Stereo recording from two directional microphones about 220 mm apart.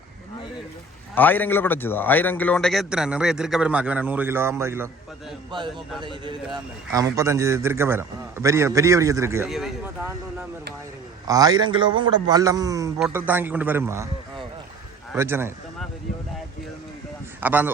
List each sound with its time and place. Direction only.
1.1 s a man's voice: 10° left (ahead or behind); by 4.9 s 10° right (ahead or behind)
5.5 s a man's voice: 20° right (ahead or behind)
9.5 s a man's voice: centre (ahead or behind)
11.3 s a man's voice: 15° right (ahead or behind)
15.1 s a man's voice: 10° right (ahead or behind)
17.4 s a man's voice: 10° right (ahead or behind)